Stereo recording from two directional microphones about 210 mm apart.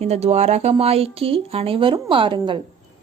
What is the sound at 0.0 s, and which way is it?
Speech, 30° right (ahead or behind).